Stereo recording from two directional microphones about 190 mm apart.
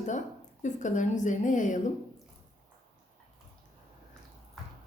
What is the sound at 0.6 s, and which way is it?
A woman's voice, 40° left (ahead or behind).